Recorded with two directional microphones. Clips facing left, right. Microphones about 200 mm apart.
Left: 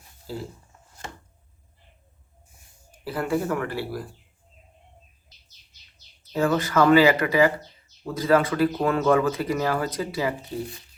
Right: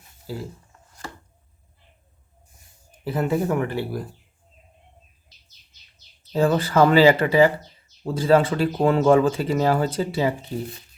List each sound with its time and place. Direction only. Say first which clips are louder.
3.0 s speech: right 3 dB; 20° right (ahead or behind)
6.3 s speech: right 3 dB; 30° right (ahead or behind)